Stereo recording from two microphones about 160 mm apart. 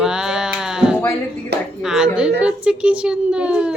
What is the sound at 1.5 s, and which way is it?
Speech, 90° right.